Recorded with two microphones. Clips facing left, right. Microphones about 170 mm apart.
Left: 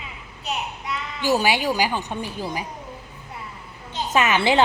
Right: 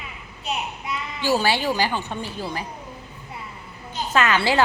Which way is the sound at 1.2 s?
15° left (ahead or behind).